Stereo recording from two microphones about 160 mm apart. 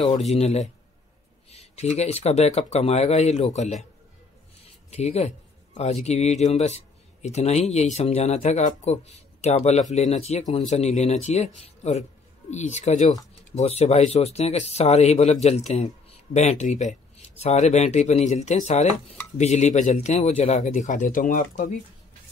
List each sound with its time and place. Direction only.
0.2 s a man's voice: 40° left (ahead or behind)
4.9 s a man's voice: 40° left (ahead or behind)